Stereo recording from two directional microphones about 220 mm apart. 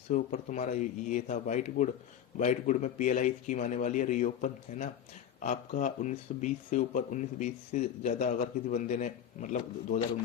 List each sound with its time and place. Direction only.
0.1 s speech: 35° left (ahead or behind)